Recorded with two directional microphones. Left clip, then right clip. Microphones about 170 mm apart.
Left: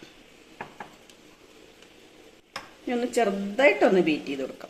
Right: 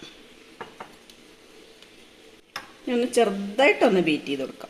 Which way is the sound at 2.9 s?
50° right (ahead or behind).